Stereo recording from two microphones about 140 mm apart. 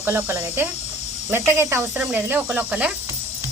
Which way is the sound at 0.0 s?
20° right (ahead or behind).